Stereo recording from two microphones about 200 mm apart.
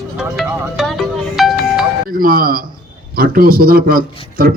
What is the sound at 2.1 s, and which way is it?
A man's voice, 45° right (ahead or behind).